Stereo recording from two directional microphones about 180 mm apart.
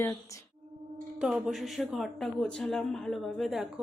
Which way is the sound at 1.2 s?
5° right (ahead or behind).